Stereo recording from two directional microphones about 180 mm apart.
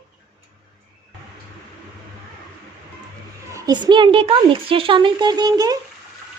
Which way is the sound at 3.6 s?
20° right (ahead or behind).